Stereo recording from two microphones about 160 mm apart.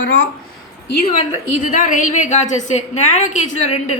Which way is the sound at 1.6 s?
55° left (ahead or behind).